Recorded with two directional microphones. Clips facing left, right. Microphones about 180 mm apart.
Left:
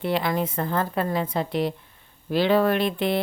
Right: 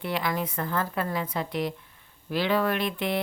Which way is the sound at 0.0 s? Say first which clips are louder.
Left 5 dB; 30° left (ahead or behind).